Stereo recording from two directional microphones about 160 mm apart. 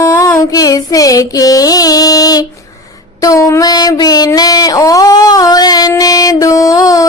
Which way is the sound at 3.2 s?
20° left (ahead or behind).